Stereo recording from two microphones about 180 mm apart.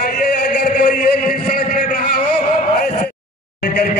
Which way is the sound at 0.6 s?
50° left (ahead or behind).